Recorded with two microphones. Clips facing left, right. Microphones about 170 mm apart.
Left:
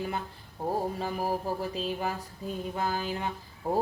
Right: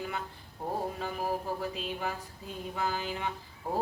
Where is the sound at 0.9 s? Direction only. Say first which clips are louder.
Left 3 dB; 35° left (ahead or behind).